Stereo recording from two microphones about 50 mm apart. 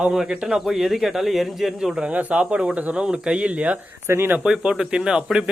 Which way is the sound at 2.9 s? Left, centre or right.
Centre.